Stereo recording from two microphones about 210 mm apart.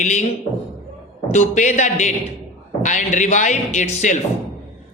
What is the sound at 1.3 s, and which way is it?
A man's voice, 35° left (ahead or behind).